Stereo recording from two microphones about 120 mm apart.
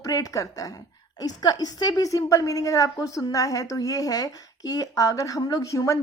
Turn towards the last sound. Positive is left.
turn(degrees=25)  # may be behind; listen again after turning